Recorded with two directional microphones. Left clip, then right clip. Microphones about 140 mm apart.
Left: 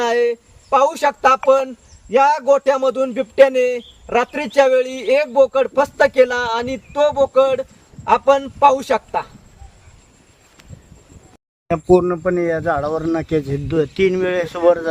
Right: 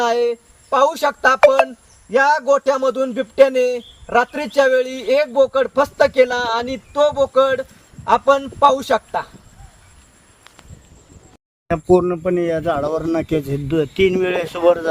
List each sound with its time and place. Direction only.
0.0 s a man's voice: 15° left (ahead or behind)
11.7 s speech: centre (ahead or behind)
12.2 s a man's voice: 60° right (ahead or behind); by 14.6 s 90° right